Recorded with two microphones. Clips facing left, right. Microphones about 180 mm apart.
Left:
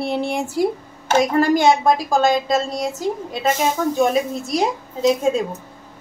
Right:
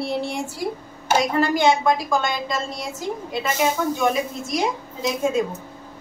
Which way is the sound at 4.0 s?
35° left (ahead or behind).